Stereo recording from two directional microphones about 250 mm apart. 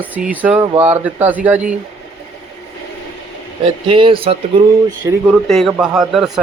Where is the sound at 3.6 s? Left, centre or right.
Right.